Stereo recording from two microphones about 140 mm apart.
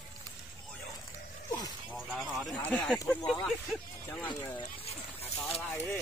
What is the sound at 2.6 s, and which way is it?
Speech, 10° left (ahead or behind).